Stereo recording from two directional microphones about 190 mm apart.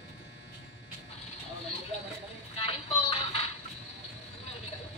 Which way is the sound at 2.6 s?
30° left (ahead or behind).